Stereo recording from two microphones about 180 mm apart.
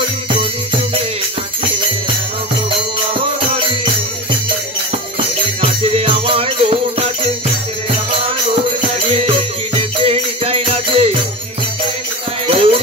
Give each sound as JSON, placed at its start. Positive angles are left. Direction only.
{"t": 5.6, "sound": "music", "side_deg": -35}
{"t": 9.1, "sound": "music", "side_deg": -35}
{"t": 12.4, "sound": "music", "side_deg": -30}